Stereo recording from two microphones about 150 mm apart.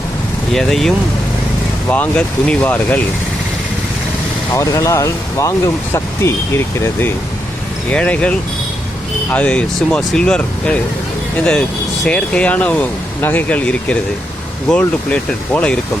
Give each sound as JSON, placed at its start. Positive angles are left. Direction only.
{"t": 0.5, "sound": "speech", "side_deg": 0}
{"t": 4.5, "sound": "speech", "side_deg": 20}
{"t": 12.0, "sound": "speech", "side_deg": 5}